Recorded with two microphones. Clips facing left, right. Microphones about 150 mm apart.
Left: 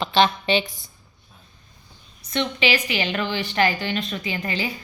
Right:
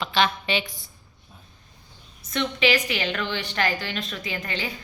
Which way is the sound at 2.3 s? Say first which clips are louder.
Even; centre (ahead or behind).